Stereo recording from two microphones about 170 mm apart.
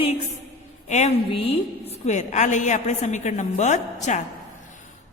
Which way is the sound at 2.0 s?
45° left (ahead or behind).